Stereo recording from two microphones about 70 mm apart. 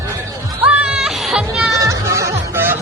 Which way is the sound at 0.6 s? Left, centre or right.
Centre.